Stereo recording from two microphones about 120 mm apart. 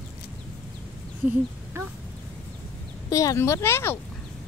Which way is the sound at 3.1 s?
30° left (ahead or behind).